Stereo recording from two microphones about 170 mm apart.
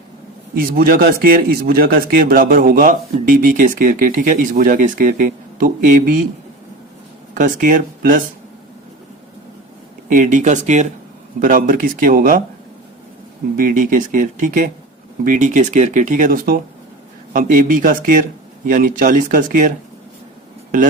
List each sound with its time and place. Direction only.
0.5 s speech: 60° right (ahead or behind)
7.3 s speech: 50° right (ahead or behind)
10.1 s speech: 50° right (ahead or behind)
13.6 s speech: 50° right (ahead or behind)